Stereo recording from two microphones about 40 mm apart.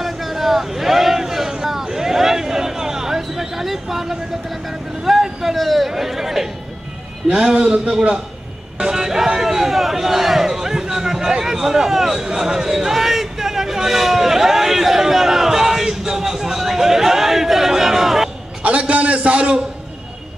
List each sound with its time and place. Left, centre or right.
0.0 s vehicle: centre
7.2 s a man's voice: right
8.7 s a sound: centre
18.6 s a man's voice: right